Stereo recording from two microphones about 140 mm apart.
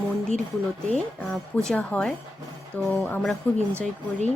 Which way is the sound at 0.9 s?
10° left (ahead or behind).